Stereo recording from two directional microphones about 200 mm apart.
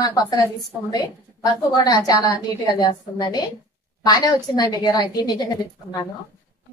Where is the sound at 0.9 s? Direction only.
20° left (ahead or behind).